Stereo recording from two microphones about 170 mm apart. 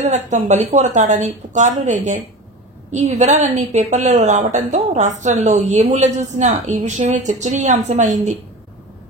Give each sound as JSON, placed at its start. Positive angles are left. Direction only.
{"t": 0.1, "sound": "a woman's voice", "side_deg": -45}